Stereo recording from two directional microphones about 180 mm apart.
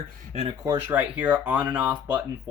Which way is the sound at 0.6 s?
15° right (ahead or behind).